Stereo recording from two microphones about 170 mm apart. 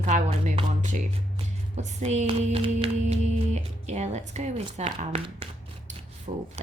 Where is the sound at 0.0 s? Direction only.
45° right (ahead or behind).